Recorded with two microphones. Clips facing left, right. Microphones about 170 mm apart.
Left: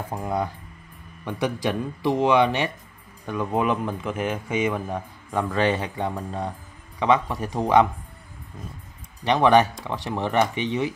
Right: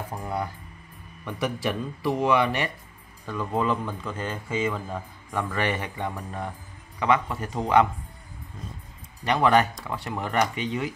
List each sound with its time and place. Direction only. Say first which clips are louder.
0.1 s speech: left 6 dB; 20° left (ahead or behind)
4.2 s speech: left 4 dB; 85° left
4.6 s speech: left 3 dB; 15° left (ahead or behind)
9.2 s speech: left 3 dB; 20° left (ahead or behind)